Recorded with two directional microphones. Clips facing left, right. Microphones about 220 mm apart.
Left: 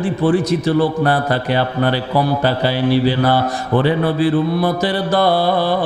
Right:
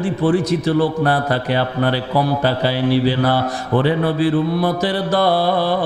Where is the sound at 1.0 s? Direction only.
15° left (ahead or behind).